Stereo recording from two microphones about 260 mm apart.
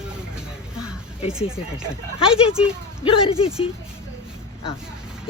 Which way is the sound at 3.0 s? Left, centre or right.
Left.